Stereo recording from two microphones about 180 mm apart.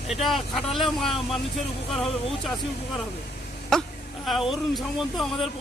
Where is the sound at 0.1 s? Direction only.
Centre (ahead or behind).